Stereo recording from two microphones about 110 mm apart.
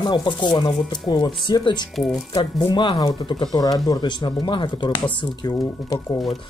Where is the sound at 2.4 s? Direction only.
40° left (ahead or behind).